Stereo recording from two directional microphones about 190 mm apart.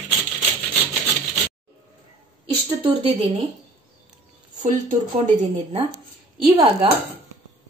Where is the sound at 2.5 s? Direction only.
25° right (ahead or behind).